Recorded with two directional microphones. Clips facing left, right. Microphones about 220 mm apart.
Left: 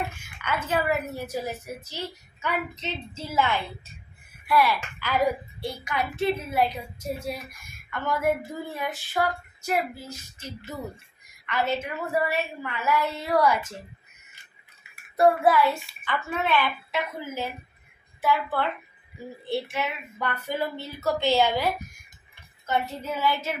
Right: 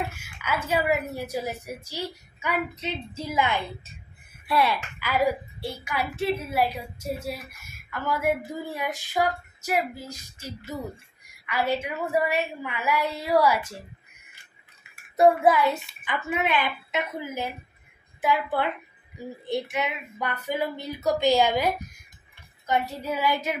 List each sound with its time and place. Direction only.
0.1 s a sound: 5° right (ahead or behind)
0.7 s a woman's voice: 10° right (ahead or behind)
4.9 s a woman's voice: 10° right (ahead or behind)
15.1 s a woman's voice: 20° right (ahead or behind)